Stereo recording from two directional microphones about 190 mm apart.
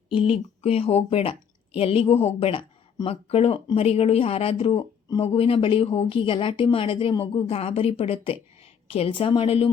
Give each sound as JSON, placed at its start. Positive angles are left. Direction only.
{"t": 0.1, "sound": "speech", "side_deg": 30}